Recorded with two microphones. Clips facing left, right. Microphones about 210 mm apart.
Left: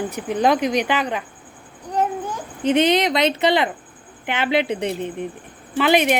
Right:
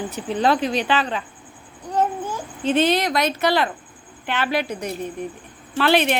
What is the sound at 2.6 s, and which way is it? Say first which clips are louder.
Speech: left 2 dB; 15° left (ahead or behind).